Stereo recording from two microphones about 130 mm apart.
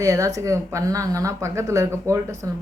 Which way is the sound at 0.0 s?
25° right (ahead or behind).